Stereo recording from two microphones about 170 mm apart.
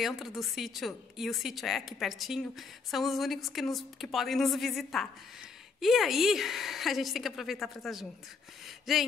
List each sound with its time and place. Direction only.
0.0 s a woman's voice: centre (ahead or behind)